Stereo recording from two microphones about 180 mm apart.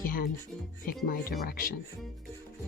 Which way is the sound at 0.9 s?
55° left (ahead or behind).